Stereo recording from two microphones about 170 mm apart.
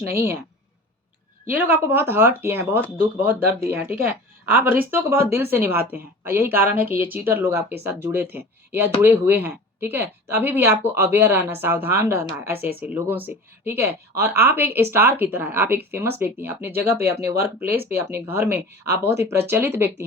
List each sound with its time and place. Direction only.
0.1 s speech: 15° right (ahead or behind)
1.5 s speech: 10° right (ahead or behind)